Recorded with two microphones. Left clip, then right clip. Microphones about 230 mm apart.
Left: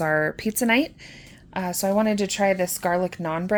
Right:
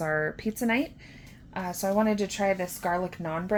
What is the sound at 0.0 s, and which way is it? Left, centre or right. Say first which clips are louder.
A woman's voice: left 6 dB; left.